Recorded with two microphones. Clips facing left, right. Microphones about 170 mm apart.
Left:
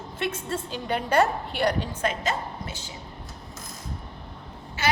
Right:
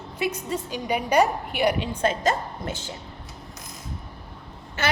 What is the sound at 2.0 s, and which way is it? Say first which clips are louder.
Speech: right 5 dB; 30° right (ahead or behind).